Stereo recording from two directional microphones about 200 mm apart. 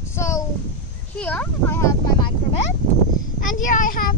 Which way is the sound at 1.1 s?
5° left (ahead or behind).